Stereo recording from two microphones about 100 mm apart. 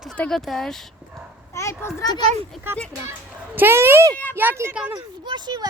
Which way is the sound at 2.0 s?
40° left (ahead or behind).